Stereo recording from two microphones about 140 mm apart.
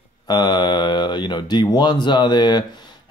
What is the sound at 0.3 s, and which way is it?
Speech, 30° left (ahead or behind).